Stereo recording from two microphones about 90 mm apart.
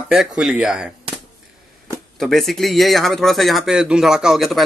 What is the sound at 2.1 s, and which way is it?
Speech, 5° left (ahead or behind).